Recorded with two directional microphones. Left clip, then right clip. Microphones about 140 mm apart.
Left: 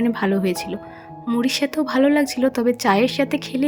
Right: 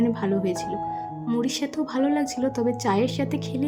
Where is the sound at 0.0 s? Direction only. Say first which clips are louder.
Left 4 dB; 25° left (ahead or behind).